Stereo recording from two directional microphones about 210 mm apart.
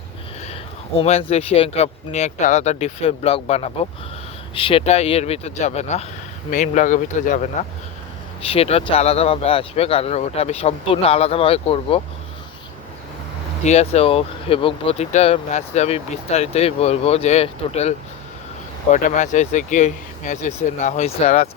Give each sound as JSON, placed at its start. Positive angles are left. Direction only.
{"t": 0.9, "sound": "speech", "side_deg": 30}
{"t": 13.7, "sound": "speech", "side_deg": 30}